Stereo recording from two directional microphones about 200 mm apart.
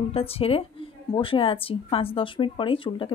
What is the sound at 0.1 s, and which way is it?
Speech, 30° left (ahead or behind).